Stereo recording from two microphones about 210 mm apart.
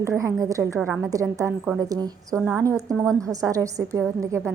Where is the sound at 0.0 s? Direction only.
15° right (ahead or behind).